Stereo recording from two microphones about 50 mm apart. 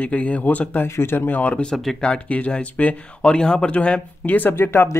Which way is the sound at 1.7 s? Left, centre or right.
Centre.